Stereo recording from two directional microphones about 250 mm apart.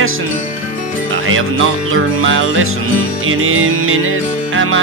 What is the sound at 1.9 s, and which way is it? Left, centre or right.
Music, right.